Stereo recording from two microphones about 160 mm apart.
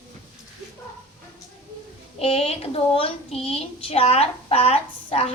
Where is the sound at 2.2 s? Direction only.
40° left (ahead or behind).